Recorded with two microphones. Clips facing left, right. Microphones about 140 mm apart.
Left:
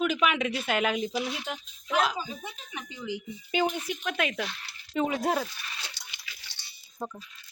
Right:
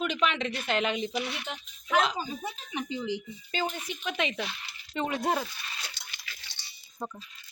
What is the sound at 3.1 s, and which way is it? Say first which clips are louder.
Speech: left 3 dB; 15° left (ahead or behind).